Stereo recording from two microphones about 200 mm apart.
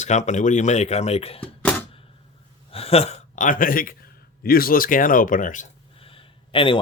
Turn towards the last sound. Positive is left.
turn(degrees=25)  # may be behind; listen again after turning